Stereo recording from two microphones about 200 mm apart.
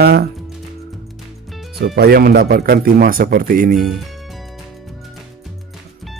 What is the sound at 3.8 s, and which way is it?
Speech, centre (ahead or behind).